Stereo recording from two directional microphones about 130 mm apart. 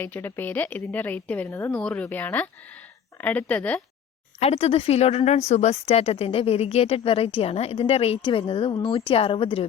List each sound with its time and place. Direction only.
0.0 s a woman's voice: 15° left (ahead or behind)
4.4 s a woman's voice: 50° left (ahead or behind)